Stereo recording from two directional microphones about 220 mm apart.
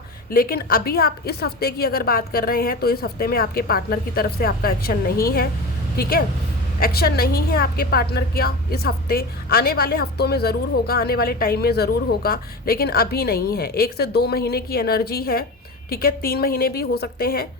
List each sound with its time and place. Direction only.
0.3 s a woman's voice: 45° left (ahead or behind)